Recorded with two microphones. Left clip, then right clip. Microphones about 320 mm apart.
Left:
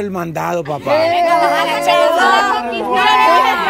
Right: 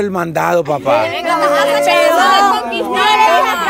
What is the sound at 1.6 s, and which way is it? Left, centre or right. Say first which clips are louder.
Music: right 2 dB; right.